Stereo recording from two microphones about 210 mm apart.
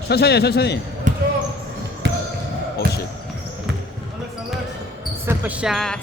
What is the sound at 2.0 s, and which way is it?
Basketball bounce, 55° right (ahead or behind).